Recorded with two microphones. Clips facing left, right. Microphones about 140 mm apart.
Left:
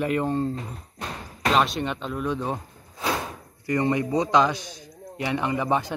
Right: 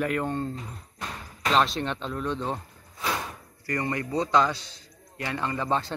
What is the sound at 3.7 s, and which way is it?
A man's voice, 20° left (ahead or behind).